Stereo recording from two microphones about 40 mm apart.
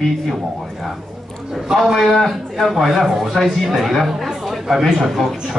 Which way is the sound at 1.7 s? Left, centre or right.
Centre.